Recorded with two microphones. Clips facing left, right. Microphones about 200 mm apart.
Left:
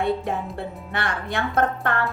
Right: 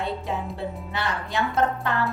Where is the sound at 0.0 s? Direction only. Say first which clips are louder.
Left 5 dB; 55° left (ahead or behind).